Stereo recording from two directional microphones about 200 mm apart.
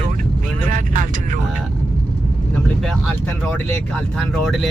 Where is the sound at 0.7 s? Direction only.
40° right (ahead or behind).